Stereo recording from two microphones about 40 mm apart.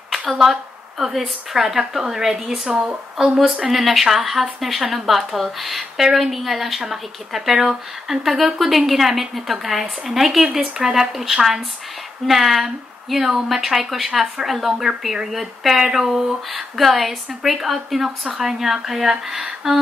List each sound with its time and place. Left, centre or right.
0.3 s a woman's voice: centre
2.7 s a woman's voice: right
3.3 s a woman's voice: centre